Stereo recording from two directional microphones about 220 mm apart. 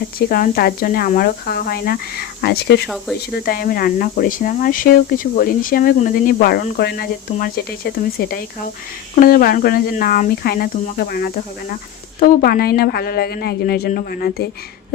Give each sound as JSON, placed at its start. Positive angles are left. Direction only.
{"t": 0.2, "sound": "speech", "side_deg": 45}
{"t": 2.8, "sound": "speech", "side_deg": 0}
{"t": 3.2, "sound": "speech", "side_deg": 45}